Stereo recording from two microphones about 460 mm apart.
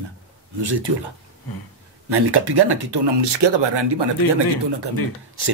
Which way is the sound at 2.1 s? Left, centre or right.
Right.